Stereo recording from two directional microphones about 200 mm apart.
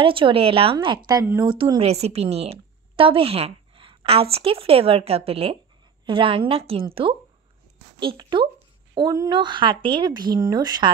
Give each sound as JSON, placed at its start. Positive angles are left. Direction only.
{"t": 0.0, "sound": "a woman's voice", "side_deg": -25}
{"t": 8.0, "sound": "speech", "side_deg": -25}